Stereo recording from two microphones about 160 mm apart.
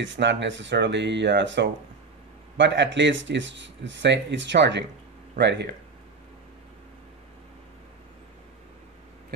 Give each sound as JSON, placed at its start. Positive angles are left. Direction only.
{"t": 0.2, "sound": "speech", "side_deg": -90}